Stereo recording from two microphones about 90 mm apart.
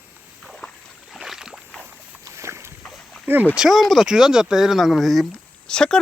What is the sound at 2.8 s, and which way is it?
Boat, 5° left (ahead or behind).